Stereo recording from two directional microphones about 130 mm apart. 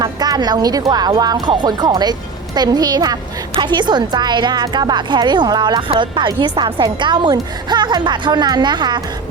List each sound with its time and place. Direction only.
0.0 s a woman's voice: 30° right (ahead or behind)